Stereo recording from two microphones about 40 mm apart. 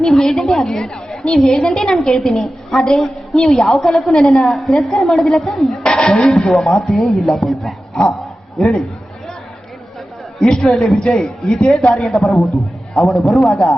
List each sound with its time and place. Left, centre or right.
0.0 s a woman's voice: centre
0.7 s a woman's voice: centre
5.7 s a sound: centre
6.4 s a woman's voice: centre
10.4 s a woman's voice: centre
11.0 s a man's voice: left
11.7 s a woman's voice: centre